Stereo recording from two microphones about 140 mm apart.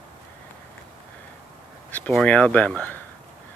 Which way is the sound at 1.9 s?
10° left (ahead or behind).